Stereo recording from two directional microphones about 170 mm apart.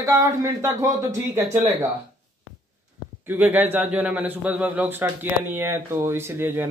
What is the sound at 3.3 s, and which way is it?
A man's voice, 10° right (ahead or behind).